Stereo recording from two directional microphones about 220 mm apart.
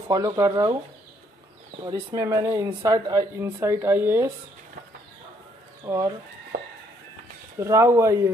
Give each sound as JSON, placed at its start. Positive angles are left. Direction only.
{"t": 0.1, "sound": "speech", "side_deg": -15}
{"t": 1.8, "sound": "speech", "side_deg": -20}
{"t": 5.9, "sound": "speech", "side_deg": -15}
{"t": 6.5, "sound": "chicken", "side_deg": -40}
{"t": 7.5, "sound": "speech", "side_deg": -15}